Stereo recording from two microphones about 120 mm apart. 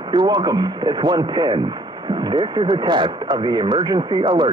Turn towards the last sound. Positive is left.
turn(degrees=-40)  # may be behind; listen again after turning